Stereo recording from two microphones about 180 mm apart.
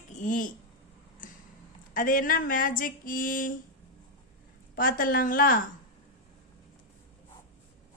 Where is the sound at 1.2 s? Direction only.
50° left (ahead or behind).